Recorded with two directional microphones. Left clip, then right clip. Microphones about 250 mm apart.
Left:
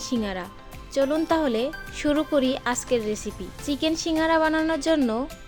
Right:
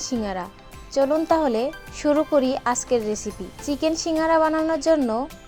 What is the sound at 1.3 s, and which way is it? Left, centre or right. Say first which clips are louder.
Speech: right 3 dB; centre.